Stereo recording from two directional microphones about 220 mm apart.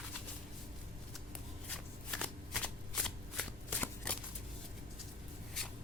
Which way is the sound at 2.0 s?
Centre (ahead or behind).